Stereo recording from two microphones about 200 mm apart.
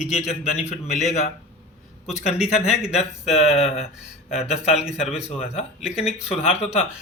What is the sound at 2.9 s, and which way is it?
Speech, 30° left (ahead or behind).